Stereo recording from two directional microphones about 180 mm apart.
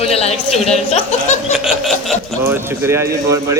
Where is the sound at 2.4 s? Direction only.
15° right (ahead or behind).